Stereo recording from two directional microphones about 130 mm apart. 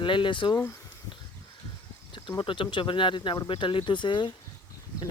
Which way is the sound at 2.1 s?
35° left (ahead or behind).